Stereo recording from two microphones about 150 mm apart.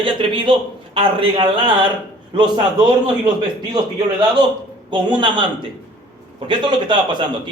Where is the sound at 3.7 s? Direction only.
30° right (ahead or behind).